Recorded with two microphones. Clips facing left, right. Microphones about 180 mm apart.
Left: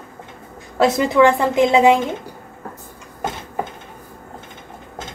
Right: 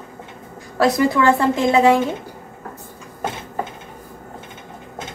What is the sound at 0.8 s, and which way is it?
A woman's voice, 20° left (ahead or behind).